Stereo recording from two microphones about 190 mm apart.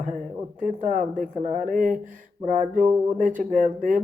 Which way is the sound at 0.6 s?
45° right (ahead or behind).